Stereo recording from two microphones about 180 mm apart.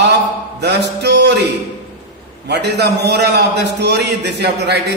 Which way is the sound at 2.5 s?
70° right (ahead or behind).